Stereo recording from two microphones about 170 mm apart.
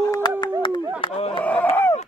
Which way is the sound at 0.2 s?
25° left (ahead or behind).